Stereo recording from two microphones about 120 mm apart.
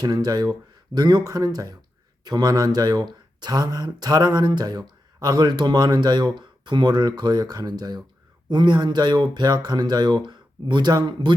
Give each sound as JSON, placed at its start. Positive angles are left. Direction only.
{"t": 0.0, "sound": "speech", "side_deg": -35}